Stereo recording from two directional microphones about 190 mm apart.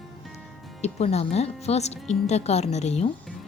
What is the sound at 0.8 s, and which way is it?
A woman's voice, 35° left (ahead or behind).